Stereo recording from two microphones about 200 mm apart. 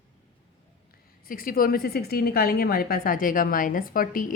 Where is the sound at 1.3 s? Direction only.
45° left (ahead or behind).